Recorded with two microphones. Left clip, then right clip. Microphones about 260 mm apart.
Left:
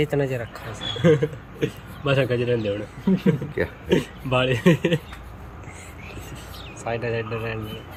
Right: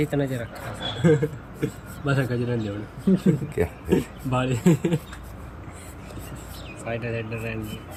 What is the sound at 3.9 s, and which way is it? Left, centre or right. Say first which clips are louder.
Speech: left 5 dB; centre.